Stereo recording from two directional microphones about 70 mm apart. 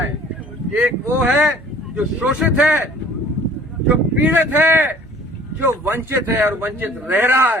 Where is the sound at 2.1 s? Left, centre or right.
Right.